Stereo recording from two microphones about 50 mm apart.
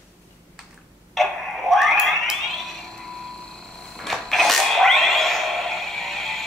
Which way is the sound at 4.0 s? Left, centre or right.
Centre.